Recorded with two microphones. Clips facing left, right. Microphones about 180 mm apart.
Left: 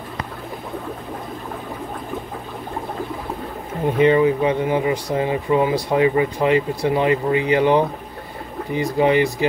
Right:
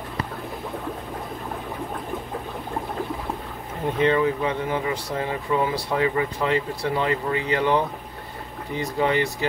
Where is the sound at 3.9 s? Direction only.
15° left (ahead or behind).